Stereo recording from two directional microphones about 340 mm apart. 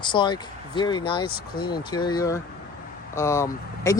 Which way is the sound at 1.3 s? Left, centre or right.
Left.